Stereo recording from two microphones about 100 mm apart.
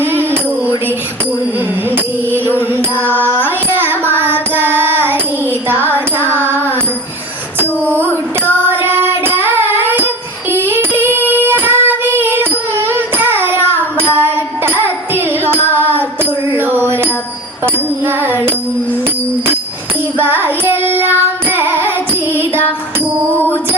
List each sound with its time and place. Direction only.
0.0 s music: 20° right (ahead or behind)
2.3 s music: 20° right (ahead or behind)
3.2 s carnatic music: 20° right (ahead or behind)
5.6 s music: 20° right (ahead or behind)
7.9 s child singing: 20° right (ahead or behind)
12.9 s carnatic music: 20° right (ahead or behind)
13.7 s child singing: 20° right (ahead or behind)
16.5 s a sound: 20° right (ahead or behind)
18.0 s music: 20° right (ahead or behind)
20.1 s child singing: 20° right (ahead or behind)
21.5 s music: 20° right (ahead or behind)
23.3 s music: 20° left (ahead or behind)